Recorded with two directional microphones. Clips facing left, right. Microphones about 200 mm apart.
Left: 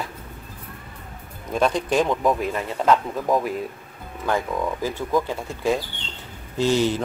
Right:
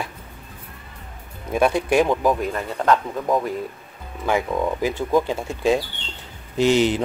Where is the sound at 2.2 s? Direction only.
Centre (ahead or behind).